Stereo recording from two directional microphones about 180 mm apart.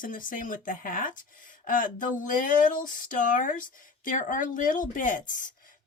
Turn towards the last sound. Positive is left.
turn(degrees=45)  # may be behind; listen again after turning